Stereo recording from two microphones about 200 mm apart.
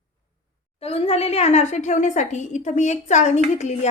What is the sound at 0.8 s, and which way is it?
A woman's voice, 30° left (ahead or behind).